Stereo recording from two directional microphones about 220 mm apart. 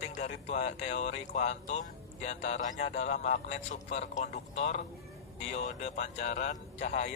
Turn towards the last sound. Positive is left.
turn(degrees=30)  # may be behind; listen again after turning